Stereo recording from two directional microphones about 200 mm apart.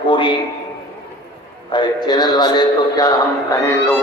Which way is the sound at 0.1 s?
25° left (ahead or behind).